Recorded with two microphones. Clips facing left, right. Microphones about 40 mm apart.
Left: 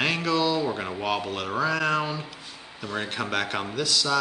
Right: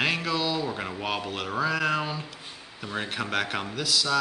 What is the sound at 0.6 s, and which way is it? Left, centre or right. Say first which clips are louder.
Speech: left 3 dB; centre.